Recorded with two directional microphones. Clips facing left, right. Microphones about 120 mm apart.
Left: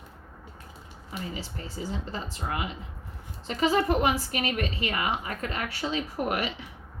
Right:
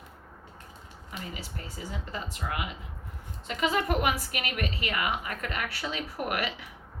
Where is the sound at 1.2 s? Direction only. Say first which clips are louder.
Left 4 dB; 30° left (ahead or behind).